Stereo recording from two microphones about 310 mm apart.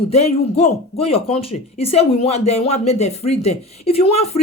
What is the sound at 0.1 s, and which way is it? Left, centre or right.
Speech, left.